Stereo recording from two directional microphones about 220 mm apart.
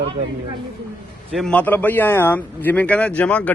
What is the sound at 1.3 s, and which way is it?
Speech, 5° left (ahead or behind).